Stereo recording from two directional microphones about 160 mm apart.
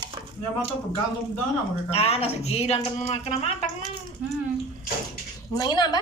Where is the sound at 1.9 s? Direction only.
40° left (ahead or behind).